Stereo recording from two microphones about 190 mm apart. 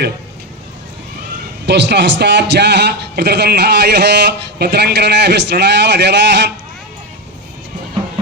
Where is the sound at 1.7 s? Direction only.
65° right (ahead or behind).